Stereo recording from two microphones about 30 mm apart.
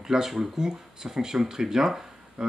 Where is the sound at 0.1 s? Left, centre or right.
Centre.